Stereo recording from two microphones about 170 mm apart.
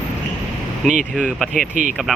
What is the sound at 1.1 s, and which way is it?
Speech, centre (ahead or behind).